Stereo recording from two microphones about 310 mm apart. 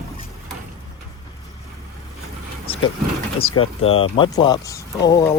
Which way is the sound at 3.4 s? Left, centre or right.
Centre.